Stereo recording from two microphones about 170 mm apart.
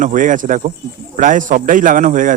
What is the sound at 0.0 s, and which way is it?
A man's voice, 50° right (ahead or behind).